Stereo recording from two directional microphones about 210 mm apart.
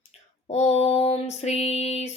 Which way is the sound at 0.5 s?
30° left (ahead or behind).